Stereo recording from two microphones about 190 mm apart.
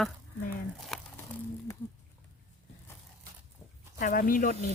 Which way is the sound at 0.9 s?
Centre (ahead or behind).